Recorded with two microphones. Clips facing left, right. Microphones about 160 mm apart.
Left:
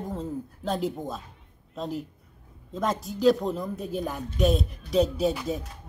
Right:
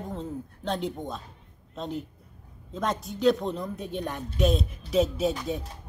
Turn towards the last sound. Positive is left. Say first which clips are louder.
# left 1 dB
turn(degrees=0)  # may be behind; listen again after turning